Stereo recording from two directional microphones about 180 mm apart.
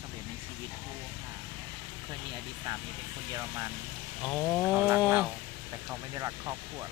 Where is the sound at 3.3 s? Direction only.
20° right (ahead or behind).